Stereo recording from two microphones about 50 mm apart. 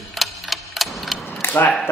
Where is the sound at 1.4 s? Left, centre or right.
Left.